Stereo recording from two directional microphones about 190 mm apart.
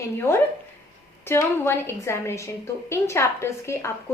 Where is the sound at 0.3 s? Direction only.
10° left (ahead or behind).